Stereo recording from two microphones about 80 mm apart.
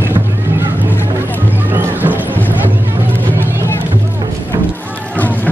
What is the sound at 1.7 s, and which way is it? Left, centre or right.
Music, right.